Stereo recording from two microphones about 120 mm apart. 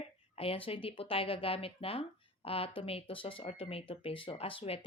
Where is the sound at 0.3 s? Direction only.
50° left (ahead or behind).